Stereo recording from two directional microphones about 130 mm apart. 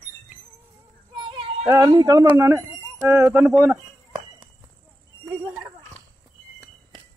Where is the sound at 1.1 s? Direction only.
40° right (ahead or behind).